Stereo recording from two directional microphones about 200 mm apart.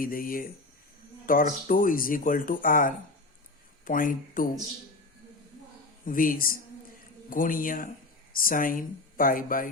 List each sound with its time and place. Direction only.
0.0 s speech: 45° left (ahead or behind)
6.1 s speech: 45° left (ahead or behind)